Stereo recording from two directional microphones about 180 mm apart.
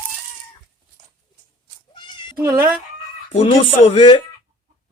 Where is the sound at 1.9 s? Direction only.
25° left (ahead or behind).